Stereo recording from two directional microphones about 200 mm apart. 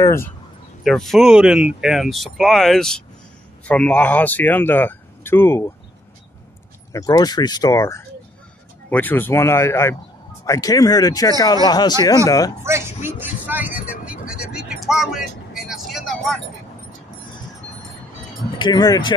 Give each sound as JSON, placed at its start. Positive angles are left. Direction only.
{"t": 0.0, "sound": "speech", "side_deg": 15}
{"t": 0.8, "sound": "speech", "side_deg": 0}
{"t": 6.9, "sound": "speech", "side_deg": 20}
{"t": 12.6, "sound": "vehicle", "side_deg": -10}
{"t": 18.6, "sound": "speech", "side_deg": 20}